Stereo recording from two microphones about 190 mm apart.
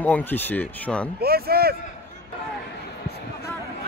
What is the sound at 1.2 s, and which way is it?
Speech, 55° right (ahead or behind).